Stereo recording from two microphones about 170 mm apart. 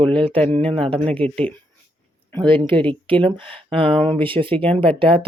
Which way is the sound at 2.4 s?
30° right (ahead or behind).